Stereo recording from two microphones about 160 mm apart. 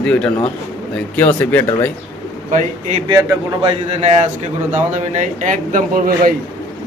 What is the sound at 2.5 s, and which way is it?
Speech, 50° right (ahead or behind).